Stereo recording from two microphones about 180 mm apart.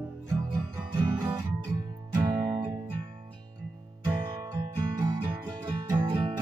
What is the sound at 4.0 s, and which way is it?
Music, 15° right (ahead or behind).